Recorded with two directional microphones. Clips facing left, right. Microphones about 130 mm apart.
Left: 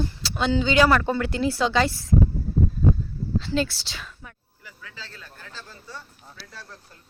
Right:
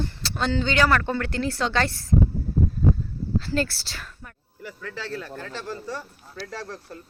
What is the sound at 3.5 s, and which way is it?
Speech, 5° right (ahead or behind).